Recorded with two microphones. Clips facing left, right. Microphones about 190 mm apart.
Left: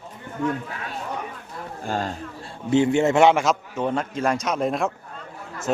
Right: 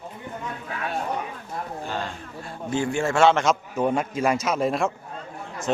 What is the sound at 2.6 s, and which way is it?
Speech, 20° left (ahead or behind).